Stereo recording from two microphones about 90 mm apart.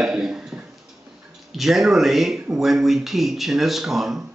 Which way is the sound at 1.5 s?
Centre (ahead or behind).